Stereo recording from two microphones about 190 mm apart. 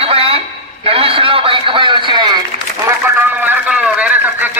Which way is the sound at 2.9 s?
10° right (ahead or behind).